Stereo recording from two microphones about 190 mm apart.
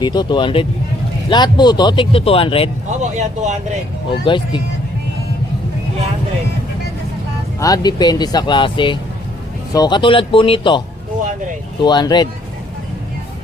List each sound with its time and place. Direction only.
0.0 s speech: 20° left (ahead or behind)
3.0 s speech: 40° right (ahead or behind)
4.1 s speech: 25° left (ahead or behind)
7.6 s speech: 20° left (ahead or behind)